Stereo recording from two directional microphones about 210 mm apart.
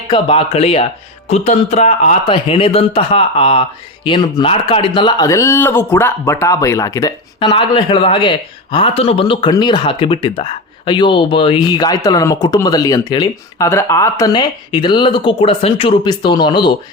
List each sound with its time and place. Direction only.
0.1 s a man's voice: 25° left (ahead or behind)